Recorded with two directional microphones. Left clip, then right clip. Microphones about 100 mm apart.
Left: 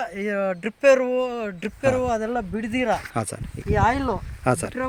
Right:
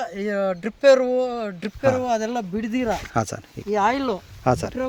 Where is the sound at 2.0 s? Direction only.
35° right (ahead or behind).